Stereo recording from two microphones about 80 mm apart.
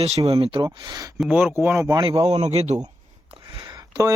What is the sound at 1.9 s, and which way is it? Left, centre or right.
Speech, right.